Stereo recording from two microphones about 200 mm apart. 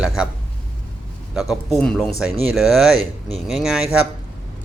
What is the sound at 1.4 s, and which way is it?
A man's voice, centre (ahead or behind).